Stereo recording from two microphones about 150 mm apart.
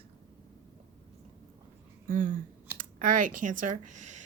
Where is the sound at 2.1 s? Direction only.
65° right (ahead or behind).